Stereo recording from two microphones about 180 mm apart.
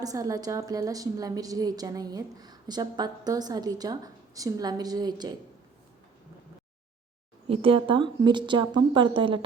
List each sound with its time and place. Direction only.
0.0 s a woman's voice: 20° right (ahead or behind)
7.4 s a woman's voice: 30° right (ahead or behind)